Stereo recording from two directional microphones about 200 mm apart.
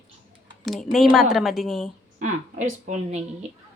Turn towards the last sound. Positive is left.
turn(degrees=-35)  # may be behind; listen again after turning